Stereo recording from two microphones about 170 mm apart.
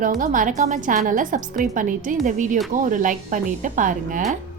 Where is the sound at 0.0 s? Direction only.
50° right (ahead or behind).